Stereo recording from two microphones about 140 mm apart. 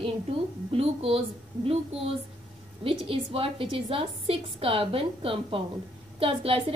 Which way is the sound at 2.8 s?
40° right (ahead or behind).